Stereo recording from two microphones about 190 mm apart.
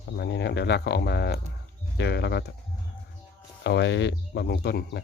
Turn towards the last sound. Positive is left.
turn(degrees=60)  # may be behind; listen again after turning